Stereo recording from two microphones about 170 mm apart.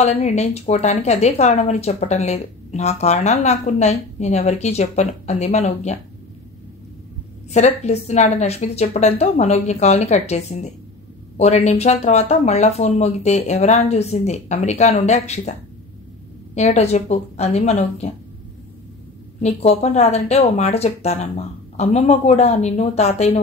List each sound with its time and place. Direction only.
0.0 s a woman's voice: 40° left (ahead or behind)
7.5 s a woman's voice: 40° left (ahead or behind)
16.5 s a woman's voice: 40° left (ahead or behind)
19.4 s a woman's voice: 40° left (ahead or behind)